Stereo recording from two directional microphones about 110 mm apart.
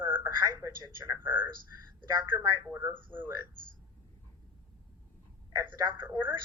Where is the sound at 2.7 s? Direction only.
20° right (ahead or behind).